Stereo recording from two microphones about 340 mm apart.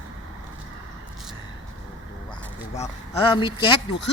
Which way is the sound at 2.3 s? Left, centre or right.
Centre.